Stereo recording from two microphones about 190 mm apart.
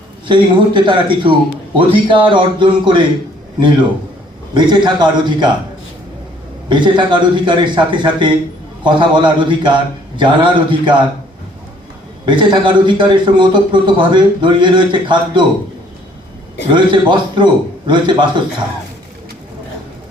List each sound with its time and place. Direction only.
0.3 s a man's voice: 25° right (ahead or behind)
4.5 s a man's voice: 25° right (ahead or behind)
6.7 s a man's voice: 25° right (ahead or behind)
12.2 s a man's voice: 25° right (ahead or behind)
16.7 s a man's voice: 25° right (ahead or behind)